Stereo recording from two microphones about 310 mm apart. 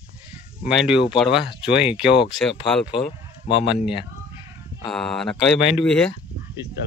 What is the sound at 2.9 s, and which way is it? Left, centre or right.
Speech, centre.